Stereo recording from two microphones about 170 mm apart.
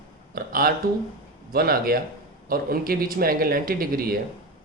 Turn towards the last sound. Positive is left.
turn(degrees=-60)  # may be behind; listen again after turning